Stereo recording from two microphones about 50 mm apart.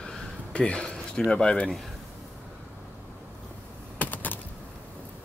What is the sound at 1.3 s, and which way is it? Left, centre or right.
Speech, centre.